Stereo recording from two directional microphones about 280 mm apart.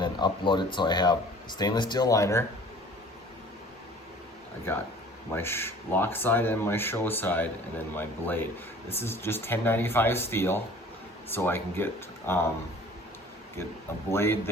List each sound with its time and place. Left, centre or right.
0.0 s speech: centre
5.3 s speech: centre
14.1 s speech: centre